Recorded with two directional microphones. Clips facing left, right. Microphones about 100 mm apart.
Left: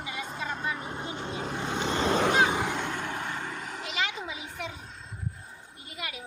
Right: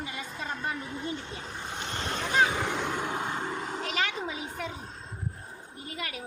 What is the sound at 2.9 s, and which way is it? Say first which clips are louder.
Vehicle: right 2 dB; 15° right (ahead or behind).